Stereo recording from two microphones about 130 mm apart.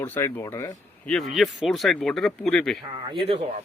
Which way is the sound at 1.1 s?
Centre (ahead or behind).